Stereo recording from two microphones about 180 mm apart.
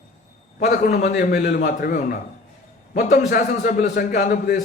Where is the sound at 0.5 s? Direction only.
45° left (ahead or behind).